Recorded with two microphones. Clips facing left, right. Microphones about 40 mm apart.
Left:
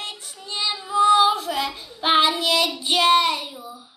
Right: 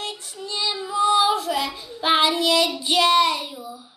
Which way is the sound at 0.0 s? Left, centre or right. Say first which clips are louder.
Right 3 dB; left.